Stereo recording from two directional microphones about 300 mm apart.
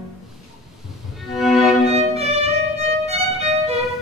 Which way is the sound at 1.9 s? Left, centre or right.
Right.